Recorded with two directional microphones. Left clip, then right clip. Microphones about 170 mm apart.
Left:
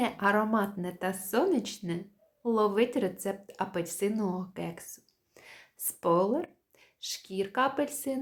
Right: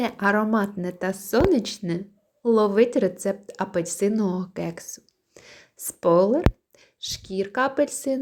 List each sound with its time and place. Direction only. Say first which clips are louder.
0.0 s a woman's voice: right 5 dB; 30° right (ahead or behind)